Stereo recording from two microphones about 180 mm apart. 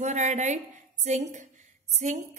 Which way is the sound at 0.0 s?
40° right (ahead or behind).